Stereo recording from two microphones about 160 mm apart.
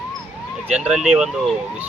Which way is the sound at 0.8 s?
5° right (ahead or behind).